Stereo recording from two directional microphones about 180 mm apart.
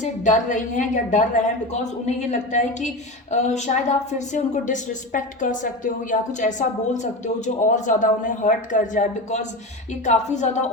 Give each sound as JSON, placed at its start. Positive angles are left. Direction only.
{"t": 0.0, "sound": "a woman's voice", "side_deg": 40}